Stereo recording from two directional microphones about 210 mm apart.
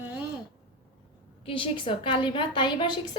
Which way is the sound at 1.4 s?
25° left (ahead or behind).